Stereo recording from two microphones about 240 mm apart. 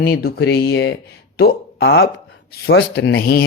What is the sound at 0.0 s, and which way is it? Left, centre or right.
Speech, left.